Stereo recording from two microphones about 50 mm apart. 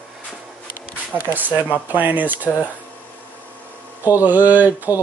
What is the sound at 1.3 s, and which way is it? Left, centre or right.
Speech, right.